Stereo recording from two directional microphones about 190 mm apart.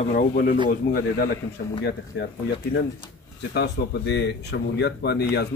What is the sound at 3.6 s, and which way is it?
Speech, 60° left (ahead or behind).